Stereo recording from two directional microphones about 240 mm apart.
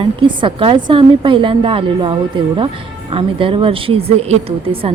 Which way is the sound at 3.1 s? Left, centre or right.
Right.